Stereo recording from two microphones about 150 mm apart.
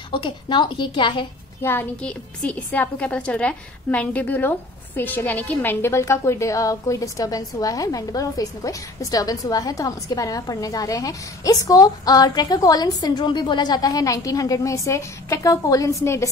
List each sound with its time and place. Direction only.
0.1 s a woman's voice: 30° left (ahead or behind)
1.6 s a woman's voice: 15° left (ahead or behind)